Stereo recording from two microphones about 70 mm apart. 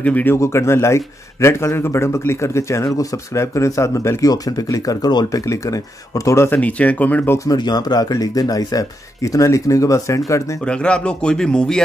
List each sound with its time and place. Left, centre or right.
0.0 s speech: left
0.4 s a man's voice: left
4.3 s a man's voice: left
6.5 s speech: left
7.5 s speech: left
10.6 s speech: centre